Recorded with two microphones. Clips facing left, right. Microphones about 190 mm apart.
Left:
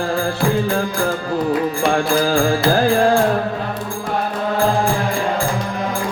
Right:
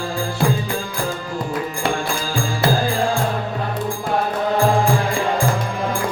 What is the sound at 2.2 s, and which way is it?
Music, 65° left (ahead or behind).